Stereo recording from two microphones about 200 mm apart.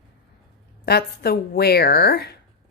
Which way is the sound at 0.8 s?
50° left (ahead or behind).